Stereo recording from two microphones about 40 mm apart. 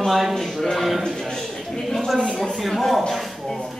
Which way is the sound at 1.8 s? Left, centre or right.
Centre.